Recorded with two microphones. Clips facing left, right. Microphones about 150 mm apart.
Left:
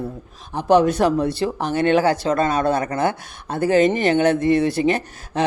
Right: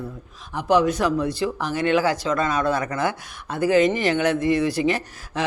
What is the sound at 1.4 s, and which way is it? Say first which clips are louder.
Speech: left 3 dB; 30° left (ahead or behind).